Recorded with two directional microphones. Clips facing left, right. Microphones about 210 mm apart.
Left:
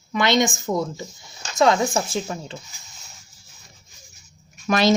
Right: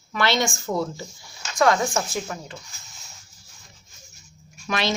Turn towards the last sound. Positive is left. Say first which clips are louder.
# left 7 dB
turn(degrees=40)  # may be behind; listen again after turning